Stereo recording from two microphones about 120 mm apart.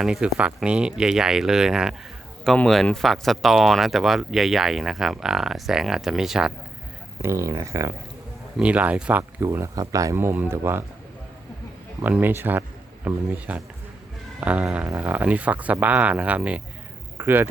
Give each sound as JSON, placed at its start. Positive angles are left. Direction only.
{"t": 0.0, "sound": "speech", "side_deg": -5}
{"t": 7.2, "sound": "speech", "side_deg": -25}
{"t": 8.5, "sound": "speech", "side_deg": -10}
{"t": 9.4, "sound": "speech", "side_deg": -25}
{"t": 12.0, "sound": "speech", "side_deg": -15}